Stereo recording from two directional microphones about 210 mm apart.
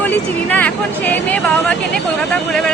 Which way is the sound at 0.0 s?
10° left (ahead or behind).